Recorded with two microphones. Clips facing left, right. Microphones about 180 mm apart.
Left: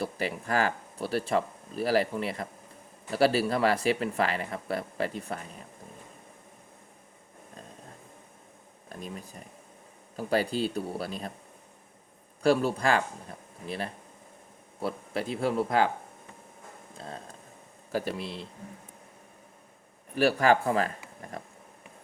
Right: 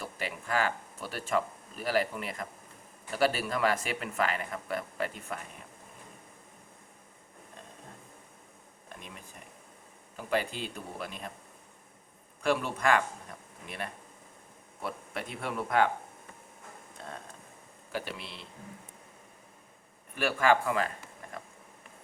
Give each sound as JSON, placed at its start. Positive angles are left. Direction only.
{"t": 0.0, "sound": "speech", "side_deg": 40}
{"t": 8.9, "sound": "speech", "side_deg": 40}
{"t": 12.4, "sound": "speech", "side_deg": 35}
{"t": 17.9, "sound": "speech", "side_deg": 40}
{"t": 20.1, "sound": "speech", "side_deg": 40}